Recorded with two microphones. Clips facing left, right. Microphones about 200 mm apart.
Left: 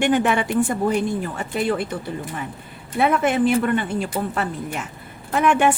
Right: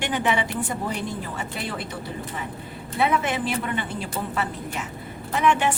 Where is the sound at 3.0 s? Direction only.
50° left (ahead or behind).